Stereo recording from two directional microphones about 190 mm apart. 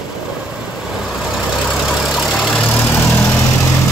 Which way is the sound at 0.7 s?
Centre (ahead or behind).